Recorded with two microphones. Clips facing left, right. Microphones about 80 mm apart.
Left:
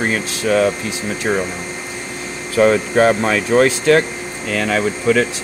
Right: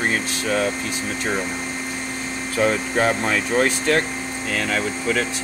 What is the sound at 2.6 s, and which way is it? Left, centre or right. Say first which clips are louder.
Speech: left 7 dB; left.